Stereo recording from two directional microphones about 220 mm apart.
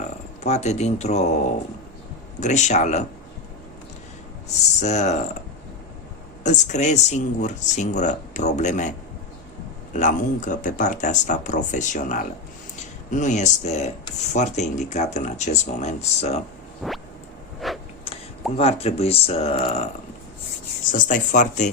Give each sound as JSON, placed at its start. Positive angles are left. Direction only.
{"t": 0.4, "sound": "speech", "side_deg": 30}
{"t": 2.4, "sound": "speech", "side_deg": 30}
{"t": 4.8, "sound": "speech", "side_deg": 30}
{"t": 6.4, "sound": "speech", "side_deg": 35}
{"t": 9.9, "sound": "speech", "side_deg": 35}
{"t": 16.8, "sound": "a sound", "side_deg": 0}
{"t": 18.0, "sound": "speech", "side_deg": 25}
{"t": 20.9, "sound": "speech", "side_deg": 35}